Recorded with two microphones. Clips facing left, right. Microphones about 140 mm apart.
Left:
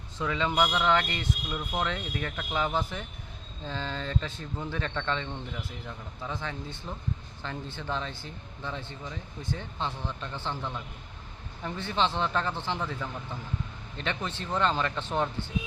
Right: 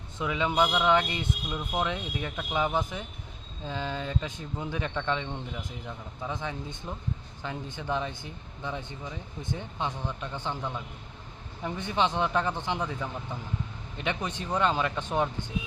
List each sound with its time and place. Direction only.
0.2 s speech: 15° right (ahead or behind)